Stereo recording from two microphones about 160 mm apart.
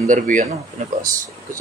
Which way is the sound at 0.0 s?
55° right (ahead or behind).